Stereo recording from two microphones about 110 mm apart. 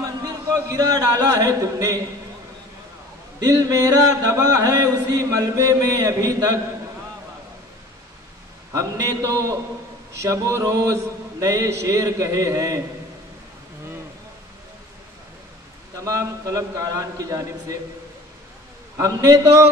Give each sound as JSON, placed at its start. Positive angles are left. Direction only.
{"t": 0.7, "sound": "chant", "side_deg": -35}
{"t": 3.3, "sound": "chant", "side_deg": -35}
{"t": 8.7, "sound": "mantra", "side_deg": -30}
{"t": 16.0, "sound": "mantra", "side_deg": -30}
{"t": 18.9, "sound": "chant", "side_deg": -35}